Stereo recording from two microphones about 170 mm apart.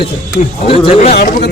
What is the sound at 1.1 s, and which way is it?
Speech, 55° left (ahead or behind).